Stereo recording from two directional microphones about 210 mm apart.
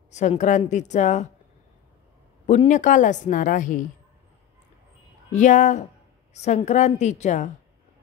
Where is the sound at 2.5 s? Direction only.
35° left (ahead or behind).